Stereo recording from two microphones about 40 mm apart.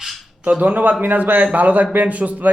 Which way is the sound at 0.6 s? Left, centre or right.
Right.